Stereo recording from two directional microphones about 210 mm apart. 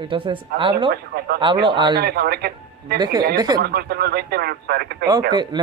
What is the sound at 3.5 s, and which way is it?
Speech, 45° right (ahead or behind).